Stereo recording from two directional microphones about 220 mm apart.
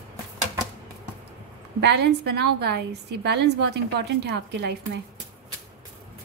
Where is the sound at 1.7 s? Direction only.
50° right (ahead or behind).